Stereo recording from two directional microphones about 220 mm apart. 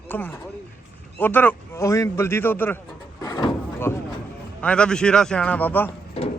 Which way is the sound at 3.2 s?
15° left (ahead or behind).